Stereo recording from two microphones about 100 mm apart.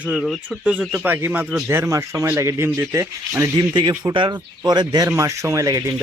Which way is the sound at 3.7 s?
50° right (ahead or behind).